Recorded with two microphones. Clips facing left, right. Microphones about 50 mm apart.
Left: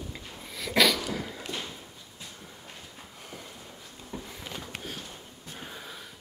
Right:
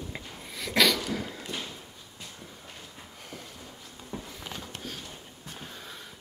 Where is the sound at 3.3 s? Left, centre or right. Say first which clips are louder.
Right 1 dB; centre.